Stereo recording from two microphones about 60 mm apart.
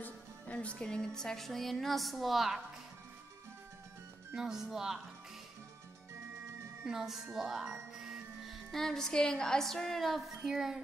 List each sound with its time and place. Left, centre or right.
0.0 s music: left
0.8 s a woman's voice: centre
4.4 s speech: centre
6.8 s a woman's voice: centre